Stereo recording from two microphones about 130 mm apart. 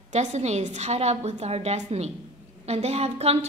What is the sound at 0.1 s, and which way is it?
A woman's voice, 65° right (ahead or behind).